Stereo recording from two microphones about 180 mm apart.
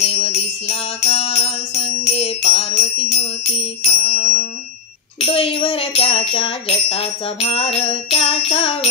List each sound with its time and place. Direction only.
0.0 s jingle bell: 35° left (ahead or behind)
3.8 s music: 40° left (ahead or behind)